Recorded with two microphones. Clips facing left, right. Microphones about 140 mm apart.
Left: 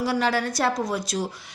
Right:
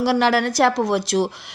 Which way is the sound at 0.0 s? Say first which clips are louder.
Right 6 dB; 80° right.